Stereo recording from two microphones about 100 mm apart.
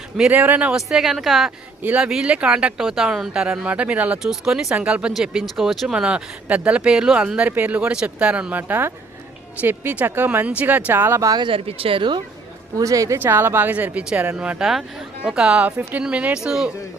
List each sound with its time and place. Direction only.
0.3 s speech: 20° right (ahead or behind)
0.8 s a woman's voice: 5° right (ahead or behind)
1.5 s speech: 15° right (ahead or behind)
4.2 s speech: 5° right (ahead or behind); by 11.3 s 25° right (ahead or behind)
11.3 s speech: 50° right (ahead or behind)
11.5 s speech: 70° right (ahead or behind)
12.7 s speech: 35° right (ahead or behind)
13.1 s speech: 20° right (ahead or behind); by 16.7 s 5° right (ahead or behind)